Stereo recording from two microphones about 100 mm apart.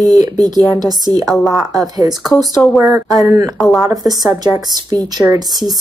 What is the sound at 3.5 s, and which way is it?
Speech, centre (ahead or behind).